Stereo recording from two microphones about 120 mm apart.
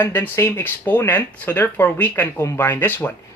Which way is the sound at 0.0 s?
15° left (ahead or behind).